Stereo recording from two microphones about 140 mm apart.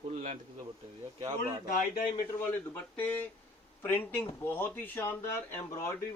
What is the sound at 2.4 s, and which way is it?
Speech, 10° left (ahead or behind).